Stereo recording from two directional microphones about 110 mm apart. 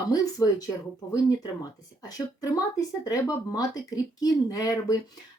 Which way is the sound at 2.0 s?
35° left (ahead or behind).